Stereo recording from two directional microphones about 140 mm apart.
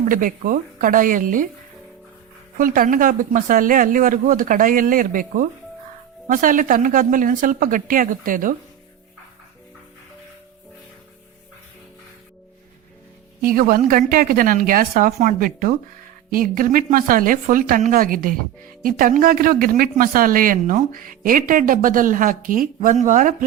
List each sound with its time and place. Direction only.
0.0 s speech: 75° right (ahead or behind)
2.6 s speech: 75° right (ahead or behind)
13.4 s a woman's voice: 90° right; by 23.5 s 65° right (ahead or behind)